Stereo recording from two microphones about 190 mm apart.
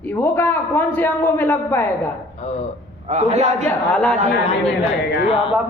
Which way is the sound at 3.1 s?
35° right (ahead or behind).